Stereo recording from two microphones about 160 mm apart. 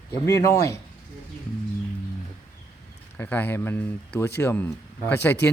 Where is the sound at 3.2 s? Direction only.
10° left (ahead or behind).